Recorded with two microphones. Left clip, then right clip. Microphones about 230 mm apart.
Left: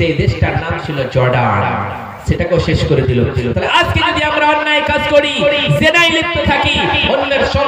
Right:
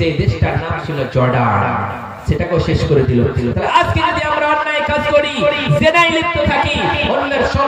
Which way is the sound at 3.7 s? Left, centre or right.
Left.